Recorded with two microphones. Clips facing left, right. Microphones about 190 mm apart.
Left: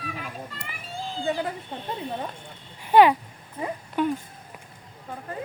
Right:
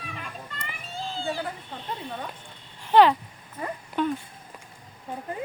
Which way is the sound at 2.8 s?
10° left (ahead or behind).